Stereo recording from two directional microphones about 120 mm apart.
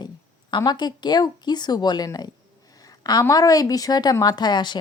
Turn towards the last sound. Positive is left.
turn(degrees=40)  # may be behind; listen again after turning